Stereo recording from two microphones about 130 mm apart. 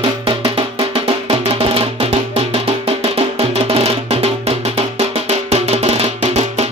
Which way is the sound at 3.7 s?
50° right (ahead or behind).